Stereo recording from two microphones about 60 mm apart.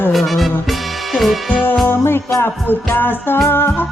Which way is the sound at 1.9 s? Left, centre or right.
Left.